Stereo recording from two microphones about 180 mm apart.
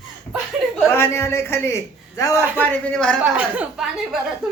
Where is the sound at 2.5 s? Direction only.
5° left (ahead or behind).